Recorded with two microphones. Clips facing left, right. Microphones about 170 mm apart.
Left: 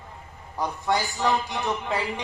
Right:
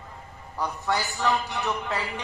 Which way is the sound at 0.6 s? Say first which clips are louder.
Left 2 dB; 15° left (ahead or behind).